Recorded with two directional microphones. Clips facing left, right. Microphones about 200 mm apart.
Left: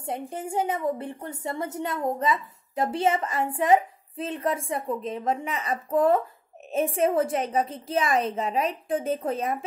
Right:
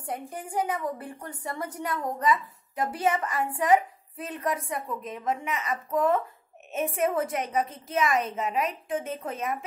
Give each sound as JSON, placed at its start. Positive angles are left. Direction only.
{"t": 0.0, "sound": "a woman's voice", "side_deg": 25}